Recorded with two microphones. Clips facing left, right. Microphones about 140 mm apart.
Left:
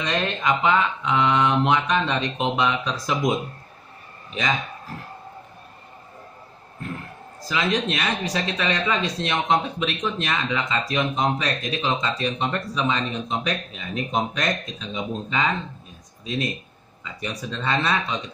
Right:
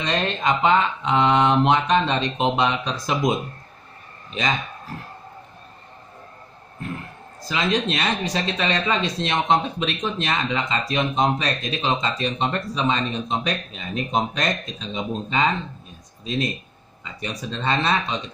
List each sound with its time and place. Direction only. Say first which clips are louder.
0.0 s speech: right 1 dB; 25° right (ahead or behind)
7.4 s speech: right 1 dB; 25° right (ahead or behind)
17.0 s speech: even; 25° right (ahead or behind)